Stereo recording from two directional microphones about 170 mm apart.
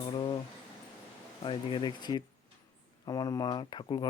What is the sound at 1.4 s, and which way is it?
Speech, 30° left (ahead or behind).